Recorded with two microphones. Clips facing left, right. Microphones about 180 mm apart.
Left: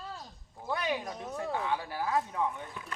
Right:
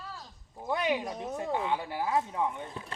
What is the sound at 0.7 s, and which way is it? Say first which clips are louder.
Speech: right 3 dB; 20° right (ahead or behind).